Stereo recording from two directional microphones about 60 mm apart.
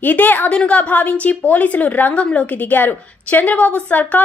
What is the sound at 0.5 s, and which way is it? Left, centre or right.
A woman's voice, centre.